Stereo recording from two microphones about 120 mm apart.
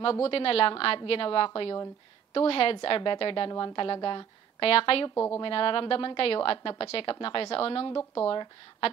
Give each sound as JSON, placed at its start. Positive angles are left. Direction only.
{"t": 0.0, "sound": "a woman's voice", "side_deg": 55}
{"t": 5.1, "sound": "a woman's voice", "side_deg": 20}
{"t": 5.4, "sound": "a woman's voice", "side_deg": 50}